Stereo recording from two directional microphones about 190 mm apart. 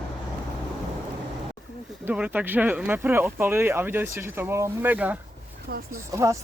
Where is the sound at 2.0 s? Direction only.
10° right (ahead or behind).